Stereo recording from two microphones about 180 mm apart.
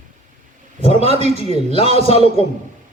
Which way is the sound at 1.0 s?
35° right (ahead or behind).